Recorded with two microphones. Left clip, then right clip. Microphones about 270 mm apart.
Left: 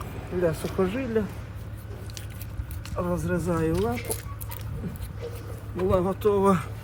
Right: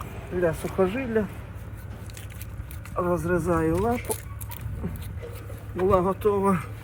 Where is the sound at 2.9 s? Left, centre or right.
Centre.